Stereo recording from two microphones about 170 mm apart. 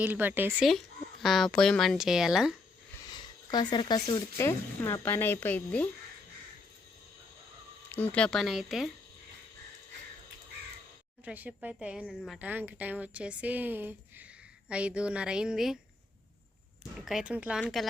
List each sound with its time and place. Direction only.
0.0 s a woman's voice: 10° right (ahead or behind)
1.2 s speech: centre (ahead or behind)
3.1 s speech: 25° left (ahead or behind)
7.9 s speech: 10° left (ahead or behind)
11.3 s a woman's voice: 10° right (ahead or behind)
12.5 s a woman's voice: 10° right (ahead or behind)
17.1 s speech: 5° right (ahead or behind)